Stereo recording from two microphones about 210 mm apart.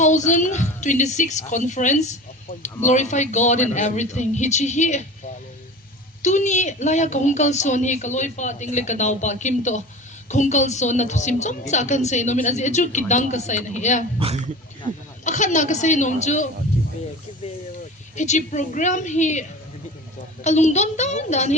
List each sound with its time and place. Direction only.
0.0 s a woman's voice: 35° left (ahead or behind)
6.2 s a woman's voice: 35° left (ahead or behind)
14.2 s speech: 30° right (ahead or behind)
15.2 s a woman's voice: 35° left (ahead or behind)
18.2 s a woman's voice: 35° left (ahead or behind)